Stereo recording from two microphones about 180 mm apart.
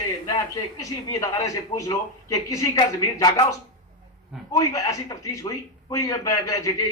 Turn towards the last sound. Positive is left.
turn(degrees=20)  # may be behind; listen again after turning